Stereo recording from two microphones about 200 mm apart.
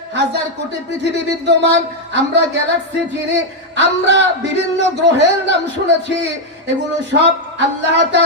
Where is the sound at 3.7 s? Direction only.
60° right (ahead or behind).